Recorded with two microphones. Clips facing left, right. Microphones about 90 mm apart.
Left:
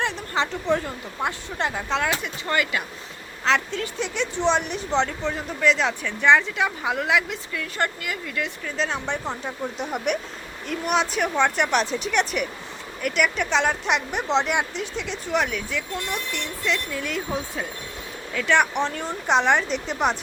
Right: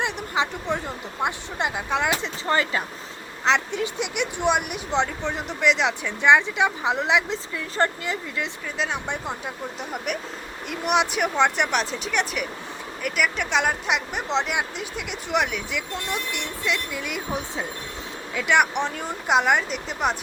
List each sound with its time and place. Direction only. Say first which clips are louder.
0.0 s a sound: even; 15° right (ahead or behind)
1.2 s speech: even; 15° right (ahead or behind)
2.2 s speech: right 1 dB; 30° right (ahead or behind)
3.4 s speech: right 1 dB; 20° right (ahead or behind)
8.6 s speech: left 1 dB; 10° right (ahead or behind)
10.7 s speech: right 1 dB; 15° right (ahead or behind)